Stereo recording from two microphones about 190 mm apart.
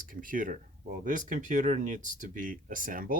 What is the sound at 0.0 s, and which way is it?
Speech, 45° right (ahead or behind).